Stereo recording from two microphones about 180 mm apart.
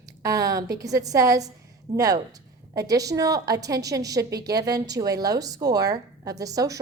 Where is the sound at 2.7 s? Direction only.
20° right (ahead or behind).